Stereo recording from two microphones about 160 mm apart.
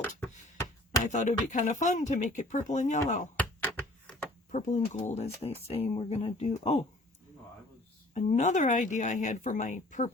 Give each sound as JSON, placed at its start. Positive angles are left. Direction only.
{"t": 0.0, "sound": "a sound", "side_deg": 15}
{"t": 1.0, "sound": "speech", "side_deg": 50}
{"t": 4.5, "sound": "speech", "side_deg": 45}
{"t": 8.1, "sound": "speech", "side_deg": 45}